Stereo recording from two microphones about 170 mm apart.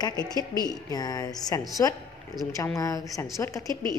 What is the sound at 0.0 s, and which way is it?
A woman's voice, 25° left (ahead or behind).